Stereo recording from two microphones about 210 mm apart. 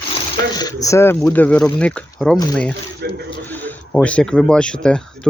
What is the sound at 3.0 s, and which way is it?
Speech, 50° right (ahead or behind).